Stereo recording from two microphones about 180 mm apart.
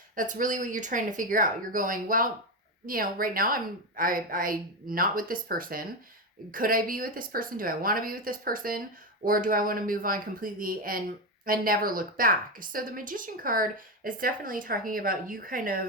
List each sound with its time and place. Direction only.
0.2 s a woman's voice: 45° right (ahead or behind)